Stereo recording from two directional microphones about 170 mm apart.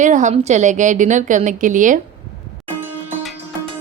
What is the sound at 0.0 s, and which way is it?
A woman's voice, 45° right (ahead or behind).